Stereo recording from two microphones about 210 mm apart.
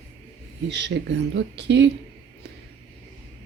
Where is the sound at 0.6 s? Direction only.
55° right (ahead or behind).